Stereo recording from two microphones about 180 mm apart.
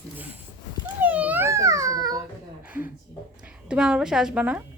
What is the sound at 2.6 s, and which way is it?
A woman's voice, 10° right (ahead or behind).